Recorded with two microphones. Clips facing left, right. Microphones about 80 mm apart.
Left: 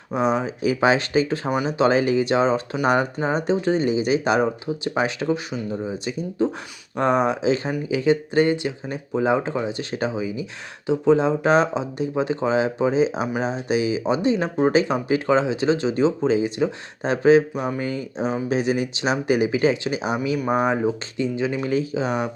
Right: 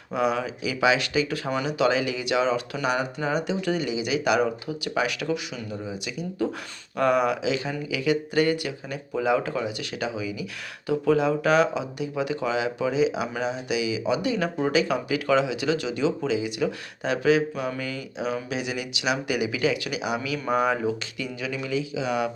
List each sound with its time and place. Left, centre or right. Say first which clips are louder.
0.1 s speech: left 3 dB; left
0.6 s speech: left 3 dB; left
1.5 s speech: left 4 dB; left
1.8 s speech: left 6 dB; left
17.5 s speech: left 3 dB; centre
17.7 s speech: left 5 dB; left